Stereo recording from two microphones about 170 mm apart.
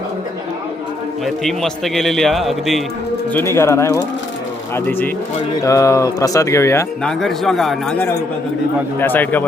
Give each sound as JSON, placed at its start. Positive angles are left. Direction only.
{"t": 1.2, "sound": "a man's voice", "side_deg": 0}
{"t": 3.3, "sound": "speech", "side_deg": 15}
{"t": 7.0, "sound": "a man's voice", "side_deg": 0}
{"t": 9.0, "sound": "speech", "side_deg": 10}